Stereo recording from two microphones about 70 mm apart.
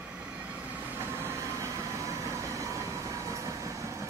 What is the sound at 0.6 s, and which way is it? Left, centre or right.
Train, right.